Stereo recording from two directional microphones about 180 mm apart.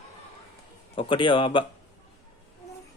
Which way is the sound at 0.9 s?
25° left (ahead or behind).